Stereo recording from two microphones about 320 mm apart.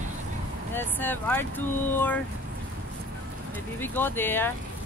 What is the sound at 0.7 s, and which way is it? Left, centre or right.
Speech, centre.